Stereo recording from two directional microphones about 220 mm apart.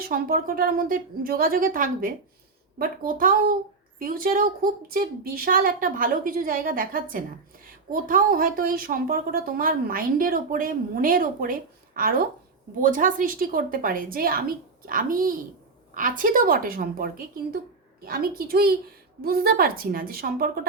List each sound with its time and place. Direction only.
0.0 s a woman's voice: 40° right (ahead or behind)